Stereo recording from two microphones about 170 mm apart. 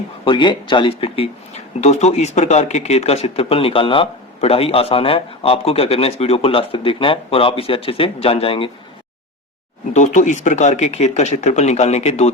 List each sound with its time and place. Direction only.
0.3 s speech: 30° left (ahead or behind)
9.9 s speech: 45° left (ahead or behind)